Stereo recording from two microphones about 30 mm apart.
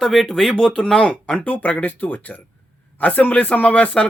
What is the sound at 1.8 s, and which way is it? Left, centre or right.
Speech, left.